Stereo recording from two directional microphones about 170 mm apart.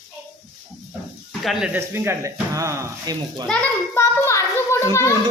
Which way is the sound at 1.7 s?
15° right (ahead or behind).